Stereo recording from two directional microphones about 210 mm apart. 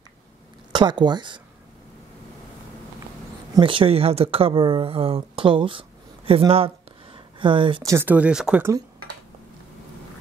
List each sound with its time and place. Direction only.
0.7 s speech: 20° right (ahead or behind)
3.5 s speech: 25° right (ahead or behind)